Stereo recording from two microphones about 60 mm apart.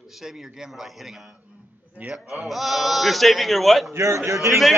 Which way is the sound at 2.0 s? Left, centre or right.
Right.